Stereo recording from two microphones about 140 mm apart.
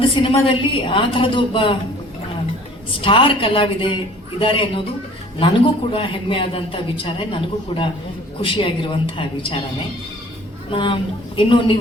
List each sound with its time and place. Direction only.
0.1 s a woman's voice: 40° left (ahead or behind)
3.0 s a woman's voice: 40° left (ahead or behind)
10.7 s a woman's voice: 40° left (ahead or behind)